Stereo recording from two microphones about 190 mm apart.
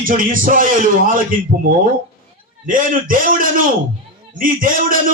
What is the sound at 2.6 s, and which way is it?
A man's voice, 45° right (ahead or behind).